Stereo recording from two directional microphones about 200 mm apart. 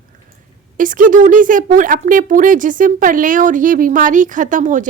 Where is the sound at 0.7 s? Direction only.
40° right (ahead or behind).